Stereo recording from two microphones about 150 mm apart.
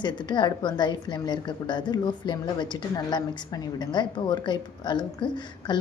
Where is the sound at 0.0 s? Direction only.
30° left (ahead or behind).